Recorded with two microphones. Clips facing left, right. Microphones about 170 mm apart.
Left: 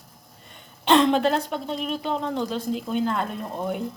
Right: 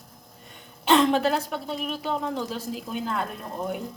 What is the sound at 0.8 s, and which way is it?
Speech, 5° right (ahead or behind).